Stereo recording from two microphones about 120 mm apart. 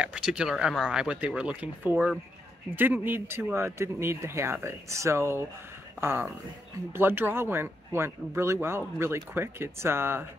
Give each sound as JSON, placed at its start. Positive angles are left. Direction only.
{"t": 0.0, "sound": "speech", "side_deg": -5}